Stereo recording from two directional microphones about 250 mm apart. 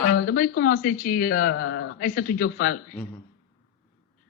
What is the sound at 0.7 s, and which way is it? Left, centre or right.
Speech, left.